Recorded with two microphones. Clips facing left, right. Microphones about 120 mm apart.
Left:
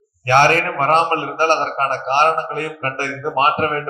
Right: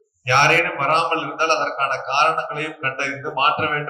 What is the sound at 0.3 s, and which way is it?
A man's voice, 40° left (ahead or behind).